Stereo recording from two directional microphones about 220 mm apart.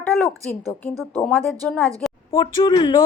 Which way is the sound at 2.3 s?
20° left (ahead or behind).